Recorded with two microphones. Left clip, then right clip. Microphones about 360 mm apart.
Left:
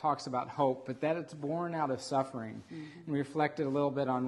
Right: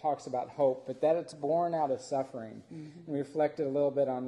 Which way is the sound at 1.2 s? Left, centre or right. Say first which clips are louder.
Right 7 dB; left.